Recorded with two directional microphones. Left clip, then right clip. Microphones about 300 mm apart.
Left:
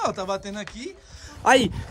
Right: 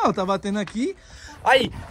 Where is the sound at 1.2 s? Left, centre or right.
Left.